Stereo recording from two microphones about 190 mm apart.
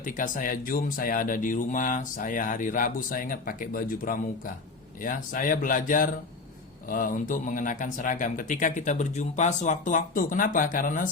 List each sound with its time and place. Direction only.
0.0 s speech: 45° left (ahead or behind)